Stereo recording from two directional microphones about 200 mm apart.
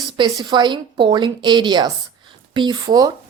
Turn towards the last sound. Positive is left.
turn(degrees=-20)  # may be behind; listen again after turning